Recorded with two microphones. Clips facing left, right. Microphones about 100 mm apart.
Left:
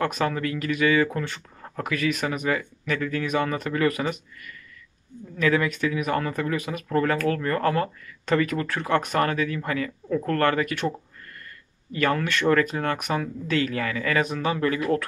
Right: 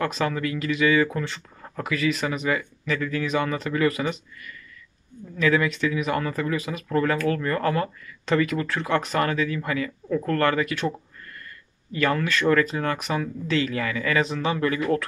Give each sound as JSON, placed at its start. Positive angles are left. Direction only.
{"t": 0.2, "sound": "speech", "side_deg": 40}
{"t": 5.4, "sound": "speech", "side_deg": 35}
{"t": 11.9, "sound": "speech", "side_deg": 40}